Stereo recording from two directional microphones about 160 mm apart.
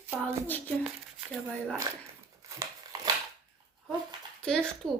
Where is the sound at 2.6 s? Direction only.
25° right (ahead or behind).